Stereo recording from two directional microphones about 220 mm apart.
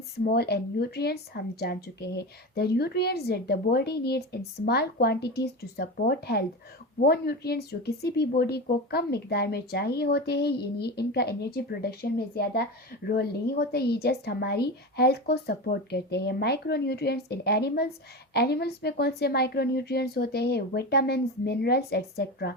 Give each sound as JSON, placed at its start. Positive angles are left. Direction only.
{"t": 0.3, "sound": "a woman's voice", "side_deg": 45}